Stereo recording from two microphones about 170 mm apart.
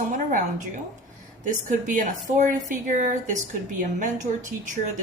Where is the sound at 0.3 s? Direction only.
50° right (ahead or behind).